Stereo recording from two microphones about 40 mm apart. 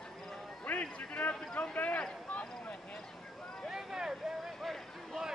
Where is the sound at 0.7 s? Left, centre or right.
Left.